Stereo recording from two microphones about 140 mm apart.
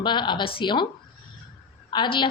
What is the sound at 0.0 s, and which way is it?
Speech, 35° left (ahead or behind).